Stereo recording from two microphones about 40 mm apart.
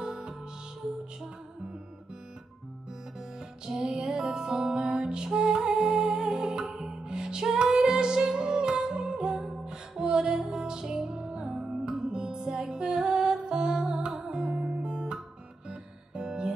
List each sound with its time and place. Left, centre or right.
0.0 s music: centre
3.3 s music: right